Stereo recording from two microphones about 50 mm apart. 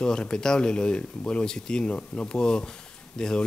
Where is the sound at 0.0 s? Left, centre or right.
Centre.